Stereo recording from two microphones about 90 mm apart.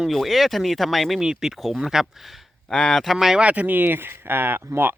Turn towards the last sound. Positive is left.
turn(degrees=-25)  # may be behind; listen again after turning